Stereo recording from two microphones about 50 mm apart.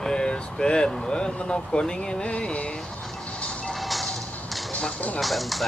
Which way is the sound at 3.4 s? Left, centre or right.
Left.